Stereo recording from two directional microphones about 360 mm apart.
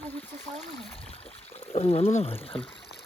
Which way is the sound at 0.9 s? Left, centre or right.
Centre.